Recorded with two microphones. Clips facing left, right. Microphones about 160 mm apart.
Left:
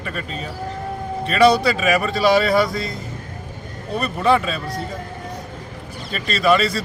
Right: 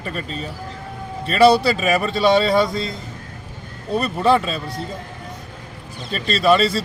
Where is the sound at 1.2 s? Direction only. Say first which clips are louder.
Right 1 dB; 30° right (ahead or behind).